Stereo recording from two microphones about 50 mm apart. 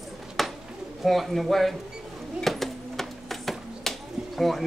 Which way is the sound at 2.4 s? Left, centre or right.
Centre.